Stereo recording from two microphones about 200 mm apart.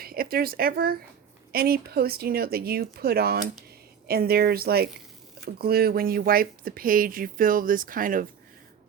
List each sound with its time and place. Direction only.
0.0 s speech: 50° right (ahead or behind)